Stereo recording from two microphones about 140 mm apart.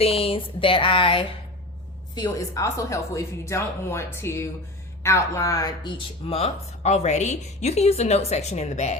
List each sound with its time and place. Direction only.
0.0 s speech: 40° left (ahead or behind)
2.1 s speech: 25° left (ahead or behind)
6.4 s a woman's voice: 55° left (ahead or behind)